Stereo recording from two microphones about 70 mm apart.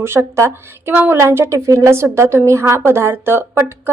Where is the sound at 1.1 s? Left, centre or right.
Right.